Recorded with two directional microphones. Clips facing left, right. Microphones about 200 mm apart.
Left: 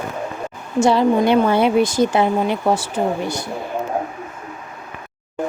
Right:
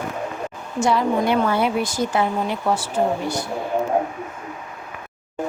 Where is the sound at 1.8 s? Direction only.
75° left (ahead or behind).